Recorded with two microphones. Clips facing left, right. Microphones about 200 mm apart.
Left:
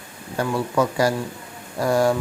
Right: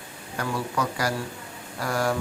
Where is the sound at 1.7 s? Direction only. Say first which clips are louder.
Left 8 dB; 25° left (ahead or behind).